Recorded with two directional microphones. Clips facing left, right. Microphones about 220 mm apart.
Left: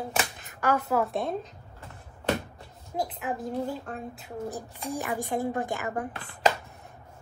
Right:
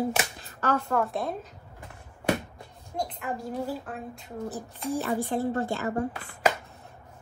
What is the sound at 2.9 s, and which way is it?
A woman's voice, 5° left (ahead or behind).